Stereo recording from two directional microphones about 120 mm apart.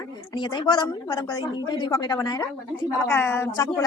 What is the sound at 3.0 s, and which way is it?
Speech, 20° left (ahead or behind).